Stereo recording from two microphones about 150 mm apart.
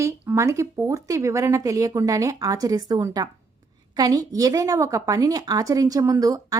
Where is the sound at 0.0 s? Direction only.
20° right (ahead or behind).